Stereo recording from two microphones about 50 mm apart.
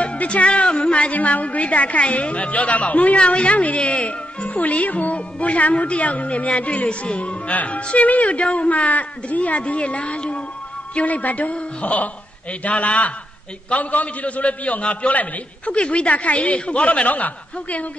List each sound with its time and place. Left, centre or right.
0.0 s speech: left